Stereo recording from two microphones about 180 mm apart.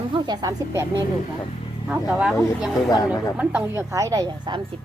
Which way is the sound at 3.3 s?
10° right (ahead or behind).